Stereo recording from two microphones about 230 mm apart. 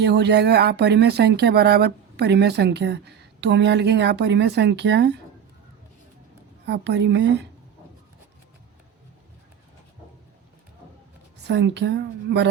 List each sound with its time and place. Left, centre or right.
0.0 s speech: right
6.7 s speech: right
11.4 s speech: right